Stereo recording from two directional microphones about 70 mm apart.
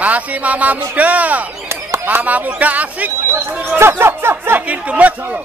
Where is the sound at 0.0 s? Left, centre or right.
Right.